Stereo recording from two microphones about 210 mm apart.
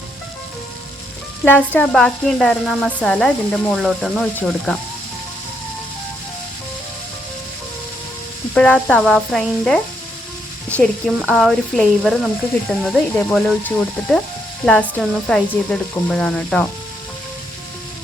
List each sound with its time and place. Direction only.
1.5 s speech: 5° left (ahead or behind)
8.5 s speech: 5° left (ahead or behind)